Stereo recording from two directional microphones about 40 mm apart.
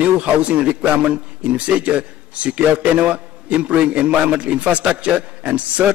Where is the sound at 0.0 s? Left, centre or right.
Right.